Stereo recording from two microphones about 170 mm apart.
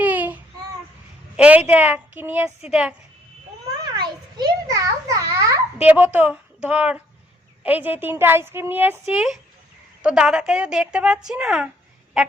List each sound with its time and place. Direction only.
0.0 s child singing: 10° right (ahead or behind)
1.4 s a woman's voice: 10° right (ahead or behind)
3.9 s a child's voice: 25° right (ahead or behind); by 11.7 s 5° right (ahead or behind)